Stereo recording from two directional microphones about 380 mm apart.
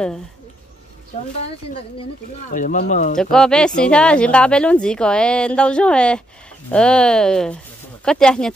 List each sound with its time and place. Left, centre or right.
1.5 s speech: centre
3.2 s speech: centre